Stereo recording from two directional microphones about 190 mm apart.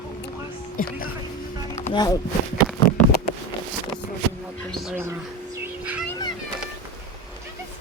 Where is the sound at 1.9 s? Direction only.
20° left (ahead or behind).